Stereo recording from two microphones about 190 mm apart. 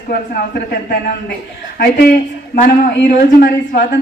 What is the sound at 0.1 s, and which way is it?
A man's voice, 55° left (ahead or behind).